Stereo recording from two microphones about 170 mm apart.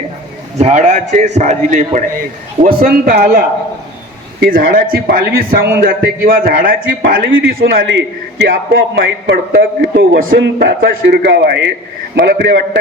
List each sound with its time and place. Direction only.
0.6 s a man's voice: 45° right (ahead or behind)
2.6 s a man's voice: 65° right (ahead or behind)
7.6 s a man's voice: 90° right; by 10.3 s 55° right (ahead or behind)
10.4 s a man's voice: 70° right (ahead or behind)
12.1 s a man's voice: 65° right (ahead or behind)